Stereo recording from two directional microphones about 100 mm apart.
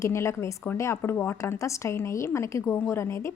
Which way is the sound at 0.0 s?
30° left (ahead or behind).